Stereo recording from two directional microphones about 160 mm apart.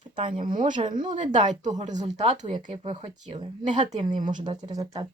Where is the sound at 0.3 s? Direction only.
55° right (ahead or behind); by 3.8 s 40° right (ahead or behind).